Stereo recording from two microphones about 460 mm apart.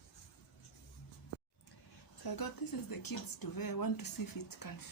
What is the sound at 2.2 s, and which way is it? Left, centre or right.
A woman's voice, left.